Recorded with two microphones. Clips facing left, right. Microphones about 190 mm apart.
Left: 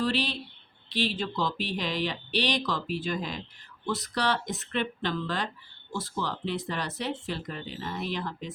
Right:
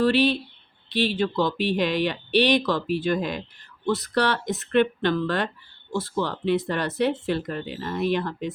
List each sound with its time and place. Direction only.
0.0 s speech: 60° right (ahead or behind)